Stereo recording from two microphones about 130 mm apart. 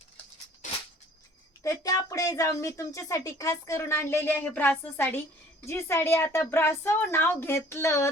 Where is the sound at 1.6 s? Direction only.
25° left (ahead or behind).